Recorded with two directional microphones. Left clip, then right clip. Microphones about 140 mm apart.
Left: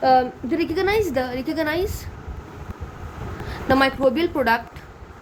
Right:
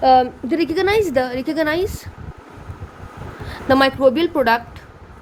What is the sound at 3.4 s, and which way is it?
A woman's voice, 30° right (ahead or behind).